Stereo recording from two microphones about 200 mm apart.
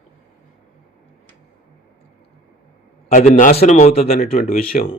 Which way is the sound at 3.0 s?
35° left (ahead or behind).